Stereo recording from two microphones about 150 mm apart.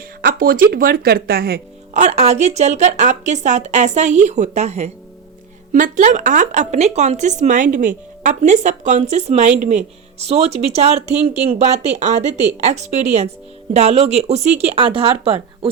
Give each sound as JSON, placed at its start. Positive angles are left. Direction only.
{"t": 0.2, "sound": "speech", "side_deg": -75}
{"t": 1.9, "sound": "speech", "side_deg": -50}
{"t": 5.7, "sound": "speech", "side_deg": -60}